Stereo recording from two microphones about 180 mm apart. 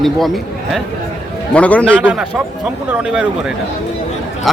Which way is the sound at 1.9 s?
10° right (ahead or behind).